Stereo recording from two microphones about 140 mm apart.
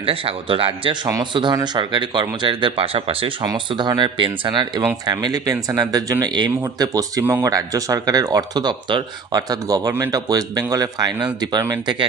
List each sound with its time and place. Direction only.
0.0 s speech: 40° right (ahead or behind)